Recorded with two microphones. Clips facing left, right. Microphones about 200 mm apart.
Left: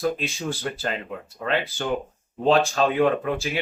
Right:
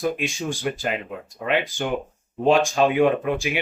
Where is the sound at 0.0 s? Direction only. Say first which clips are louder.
Right 1 dB; 15° right (ahead or behind).